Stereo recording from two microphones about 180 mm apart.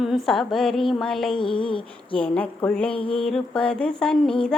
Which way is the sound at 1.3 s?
30° left (ahead or behind).